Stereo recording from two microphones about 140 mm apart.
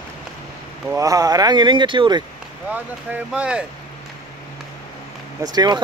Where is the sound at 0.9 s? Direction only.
25° right (ahead or behind).